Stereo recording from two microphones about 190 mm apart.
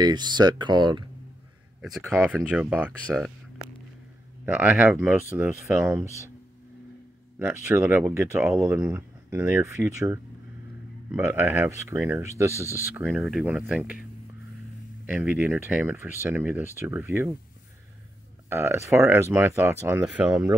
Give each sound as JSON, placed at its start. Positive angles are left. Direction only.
{"t": 0.0, "sound": "speech", "side_deg": -20}
{"t": 1.8, "sound": "speech", "side_deg": 0}
{"t": 4.5, "sound": "speech", "side_deg": -10}
{"t": 7.3, "sound": "speech", "side_deg": -15}
{"t": 13.0, "sound": "speech", "side_deg": 0}
{"t": 15.0, "sound": "speech", "side_deg": -10}
{"t": 18.5, "sound": "speech", "side_deg": -10}